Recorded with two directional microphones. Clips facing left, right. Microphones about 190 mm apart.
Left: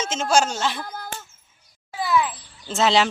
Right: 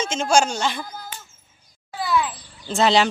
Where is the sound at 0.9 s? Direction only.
60° left (ahead or behind).